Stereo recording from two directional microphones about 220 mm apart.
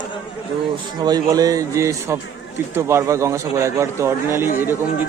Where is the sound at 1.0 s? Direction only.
15° right (ahead or behind).